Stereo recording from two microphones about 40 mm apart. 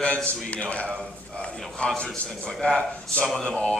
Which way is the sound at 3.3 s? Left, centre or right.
Centre.